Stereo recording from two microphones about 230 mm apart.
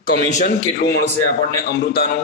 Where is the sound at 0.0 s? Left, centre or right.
Left.